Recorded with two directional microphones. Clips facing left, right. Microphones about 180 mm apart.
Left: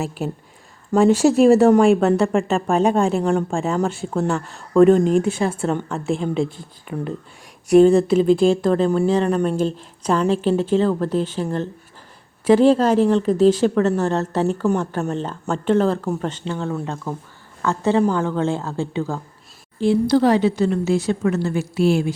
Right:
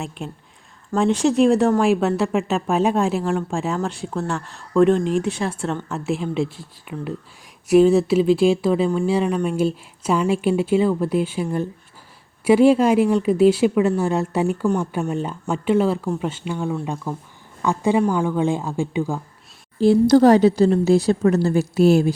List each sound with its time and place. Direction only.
0.0 s a woman's voice: 5° left (ahead or behind)
12.5 s a woman's voice: 10° right (ahead or behind)
19.8 s speech: 40° right (ahead or behind)